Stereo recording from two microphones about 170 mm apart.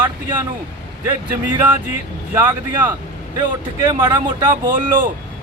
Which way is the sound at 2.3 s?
15° right (ahead or behind).